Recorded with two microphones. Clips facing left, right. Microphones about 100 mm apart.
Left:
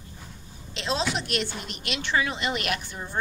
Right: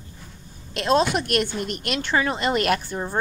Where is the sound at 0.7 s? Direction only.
55° right (ahead or behind).